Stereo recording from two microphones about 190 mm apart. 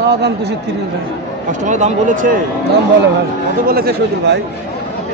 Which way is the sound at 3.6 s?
50° right (ahead or behind).